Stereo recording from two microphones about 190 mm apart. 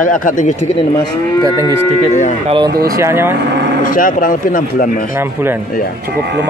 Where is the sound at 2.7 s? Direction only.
50° right (ahead or behind).